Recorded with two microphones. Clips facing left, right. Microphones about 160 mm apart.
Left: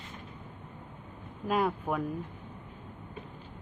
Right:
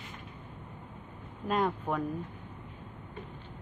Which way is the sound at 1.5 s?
5° left (ahead or behind).